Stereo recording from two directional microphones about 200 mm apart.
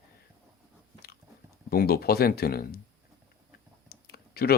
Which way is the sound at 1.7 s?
50° left (ahead or behind).